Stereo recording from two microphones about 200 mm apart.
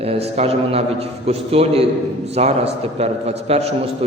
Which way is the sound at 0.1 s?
30° right (ahead or behind).